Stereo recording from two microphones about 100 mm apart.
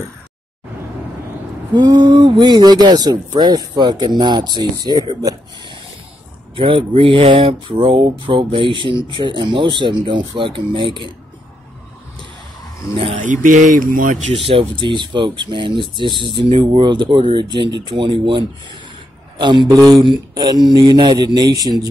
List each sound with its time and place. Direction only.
1.7 s speech: 45° right (ahead or behind)
6.5 s speech: 60° right (ahead or behind)
12.9 s speech: 75° right (ahead or behind)
14.3 s speech: 65° right (ahead or behind); by 21.7 s 40° right (ahead or behind)